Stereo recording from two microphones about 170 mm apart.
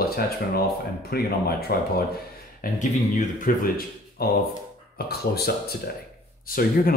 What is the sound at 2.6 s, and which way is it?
Speech, 50° left (ahead or behind).